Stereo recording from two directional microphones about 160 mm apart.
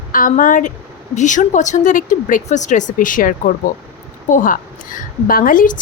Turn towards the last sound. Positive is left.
turn(degrees=60)  # may be behind; listen again after turning